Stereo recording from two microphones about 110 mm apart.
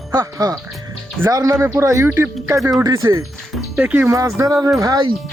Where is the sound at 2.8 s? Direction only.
30° right (ahead or behind).